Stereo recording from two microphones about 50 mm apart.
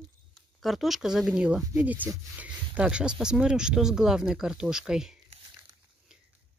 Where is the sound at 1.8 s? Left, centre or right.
Right.